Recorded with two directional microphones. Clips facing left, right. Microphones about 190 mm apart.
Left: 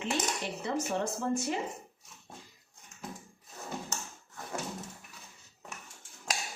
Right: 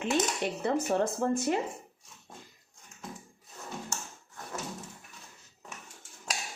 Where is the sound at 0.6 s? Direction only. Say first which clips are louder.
Right 5 dB; 55° right (ahead or behind).